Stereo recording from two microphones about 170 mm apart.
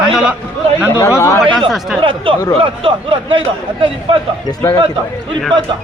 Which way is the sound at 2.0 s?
30° right (ahead or behind).